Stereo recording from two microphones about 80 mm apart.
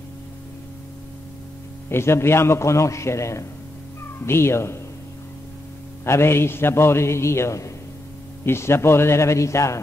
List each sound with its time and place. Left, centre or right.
1.9 s a man's voice: left
6.0 s a man's voice: left